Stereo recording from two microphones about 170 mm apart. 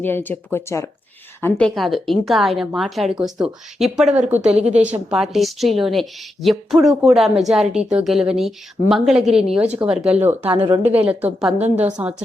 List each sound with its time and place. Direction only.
0.0 s a woman's voice: 10° left (ahead or behind); by 10.5 s 10° right (ahead or behind)
10.5 s a woman's voice: 35° right (ahead or behind)
10.9 s a woman's voice: 10° right (ahead or behind)